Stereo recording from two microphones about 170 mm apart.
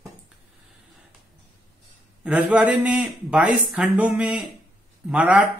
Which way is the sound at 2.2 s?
10° right (ahead or behind).